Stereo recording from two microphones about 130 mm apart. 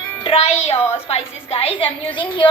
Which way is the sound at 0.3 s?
50° left (ahead or behind).